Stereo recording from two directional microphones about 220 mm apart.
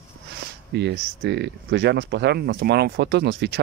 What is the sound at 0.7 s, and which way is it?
Speech, 50° right (ahead or behind).